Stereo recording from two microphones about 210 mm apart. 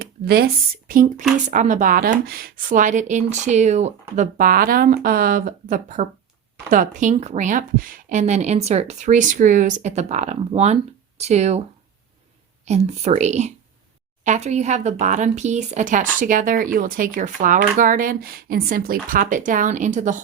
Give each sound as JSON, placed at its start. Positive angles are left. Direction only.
{"t": 0.0, "sound": "speech", "side_deg": -45}
{"t": 12.6, "sound": "speech", "side_deg": -30}